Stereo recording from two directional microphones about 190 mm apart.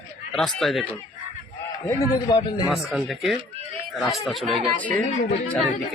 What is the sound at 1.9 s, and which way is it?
Speech, 20° left (ahead or behind).